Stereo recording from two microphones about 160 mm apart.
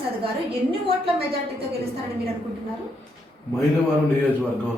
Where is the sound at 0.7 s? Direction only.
35° right (ahead or behind).